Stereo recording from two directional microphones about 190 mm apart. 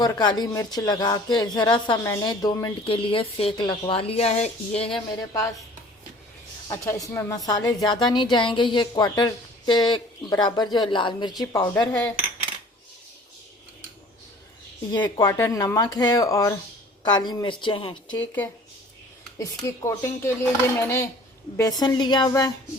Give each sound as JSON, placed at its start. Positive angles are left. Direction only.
{"t": 0.0, "sound": "speech", "side_deg": 20}
{"t": 6.7, "sound": "speech", "side_deg": 15}
{"t": 14.9, "sound": "speech", "side_deg": 25}
{"t": 19.4, "sound": "speech", "side_deg": 15}